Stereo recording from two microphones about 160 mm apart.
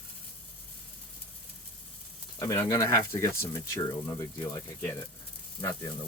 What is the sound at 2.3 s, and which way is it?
Speech, 20° left (ahead or behind).